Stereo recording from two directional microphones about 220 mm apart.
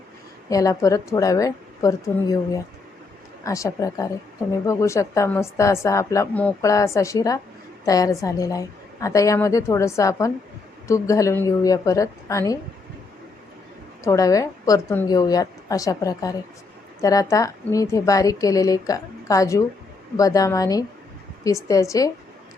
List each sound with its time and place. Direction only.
0.5 s a woman's voice: 15° left (ahead or behind)
3.4 s a woman's voice: 15° left (ahead or behind)
14.0 s a woman's voice: 15° left (ahead or behind)